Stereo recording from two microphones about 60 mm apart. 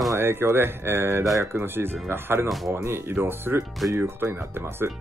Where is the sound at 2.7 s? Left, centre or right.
Right.